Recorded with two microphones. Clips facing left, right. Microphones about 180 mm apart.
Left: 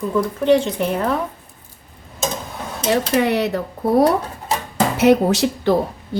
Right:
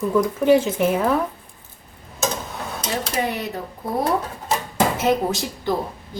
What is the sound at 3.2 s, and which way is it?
Speech, 75° left (ahead or behind).